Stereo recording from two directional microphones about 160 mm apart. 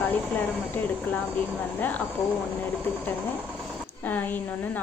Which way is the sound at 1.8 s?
10° left (ahead or behind).